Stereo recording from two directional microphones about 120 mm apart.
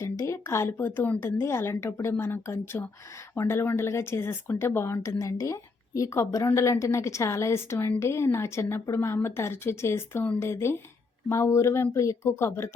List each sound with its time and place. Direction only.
0.0 s speech: 25° left (ahead or behind)